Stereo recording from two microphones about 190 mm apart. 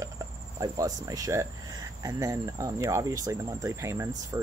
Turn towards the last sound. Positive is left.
turn(degrees=-15)  # may be behind; listen again after turning